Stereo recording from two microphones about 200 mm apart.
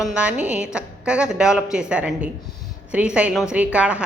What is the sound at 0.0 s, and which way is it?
A woman's voice, 5° right (ahead or behind).